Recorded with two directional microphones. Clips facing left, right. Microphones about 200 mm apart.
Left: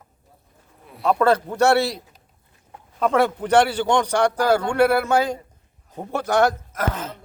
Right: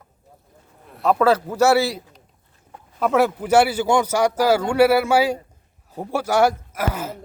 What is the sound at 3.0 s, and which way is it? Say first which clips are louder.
Speech: right 1 dB; 5° right (ahead or behind).